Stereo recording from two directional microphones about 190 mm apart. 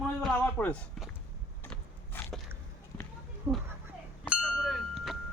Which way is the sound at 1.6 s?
10° left (ahead or behind).